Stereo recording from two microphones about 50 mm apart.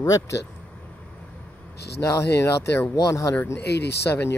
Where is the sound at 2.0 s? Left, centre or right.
Left.